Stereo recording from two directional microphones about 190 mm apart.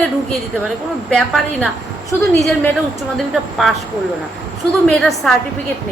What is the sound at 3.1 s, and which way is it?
Speech, centre (ahead or behind).